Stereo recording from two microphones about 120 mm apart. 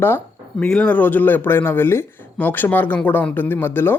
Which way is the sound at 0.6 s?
5° left (ahead or behind).